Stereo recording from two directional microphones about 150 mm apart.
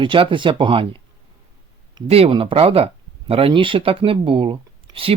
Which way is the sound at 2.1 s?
40° right (ahead or behind).